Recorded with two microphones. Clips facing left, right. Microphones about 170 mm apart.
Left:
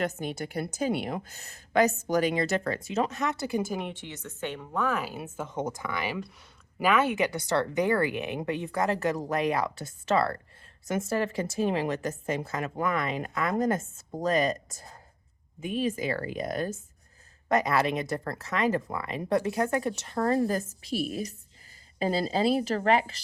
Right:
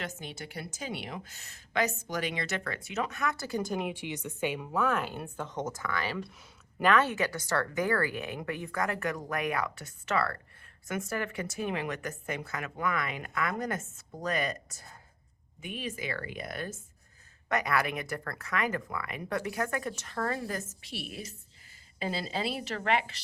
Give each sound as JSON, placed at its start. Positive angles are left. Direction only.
{"t": 0.0, "sound": "a woman's voice", "side_deg": 45}
{"t": 3.6, "sound": "speech", "side_deg": 0}
{"t": 15.6, "sound": "a woman's voice", "side_deg": 35}